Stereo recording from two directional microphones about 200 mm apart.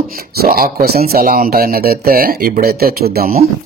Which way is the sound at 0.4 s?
50° right (ahead or behind).